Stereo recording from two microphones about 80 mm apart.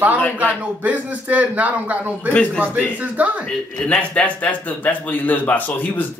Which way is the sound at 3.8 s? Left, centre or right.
Centre.